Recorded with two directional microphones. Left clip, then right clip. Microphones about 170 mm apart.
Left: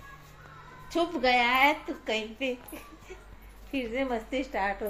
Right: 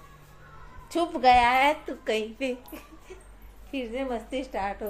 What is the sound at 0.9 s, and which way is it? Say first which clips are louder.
A woman's voice: right 5 dB; 20° right (ahead or behind).